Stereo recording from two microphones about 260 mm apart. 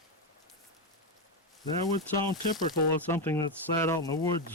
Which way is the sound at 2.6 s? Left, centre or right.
Centre.